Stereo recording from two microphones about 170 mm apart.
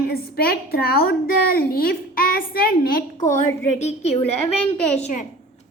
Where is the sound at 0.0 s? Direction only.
65° left (ahead or behind).